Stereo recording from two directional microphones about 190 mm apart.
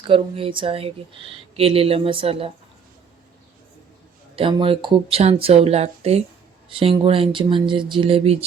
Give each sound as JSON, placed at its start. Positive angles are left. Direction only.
{"t": 0.1, "sound": "speech", "side_deg": -30}
{"t": 4.4, "sound": "speech", "side_deg": -30}